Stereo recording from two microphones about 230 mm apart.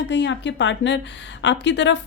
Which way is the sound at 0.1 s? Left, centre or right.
Left.